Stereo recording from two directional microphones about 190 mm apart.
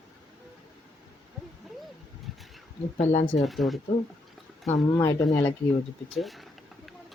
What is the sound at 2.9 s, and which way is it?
Speech, 35° left (ahead or behind).